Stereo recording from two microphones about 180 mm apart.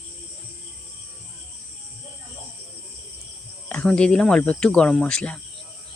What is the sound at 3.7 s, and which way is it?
Speech, 5° left (ahead or behind).